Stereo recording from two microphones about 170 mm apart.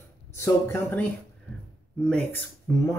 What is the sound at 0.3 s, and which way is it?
Speech, 15° left (ahead or behind).